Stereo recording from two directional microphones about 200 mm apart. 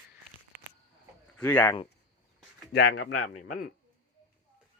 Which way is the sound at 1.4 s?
10° left (ahead or behind).